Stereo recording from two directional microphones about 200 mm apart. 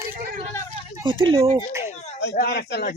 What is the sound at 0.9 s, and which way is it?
Speech, 25° right (ahead or behind).